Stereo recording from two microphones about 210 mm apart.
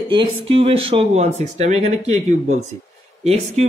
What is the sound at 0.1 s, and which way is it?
A man's voice, 25° right (ahead or behind).